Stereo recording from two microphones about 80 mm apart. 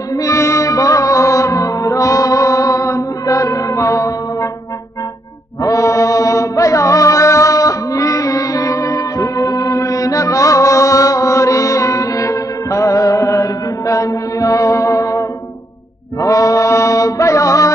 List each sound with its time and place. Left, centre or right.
0.1 s music: left
5.6 s music: left
16.2 s mantra: left